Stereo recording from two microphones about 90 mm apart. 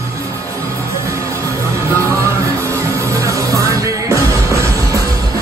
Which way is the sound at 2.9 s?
35° right (ahead or behind).